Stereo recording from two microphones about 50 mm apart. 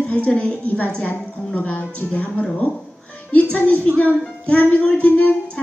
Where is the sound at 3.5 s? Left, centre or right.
Left.